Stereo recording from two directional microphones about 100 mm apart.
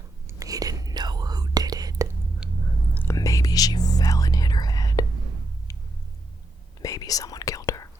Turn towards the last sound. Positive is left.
turn(degrees=35)  # may be behind; listen again after turning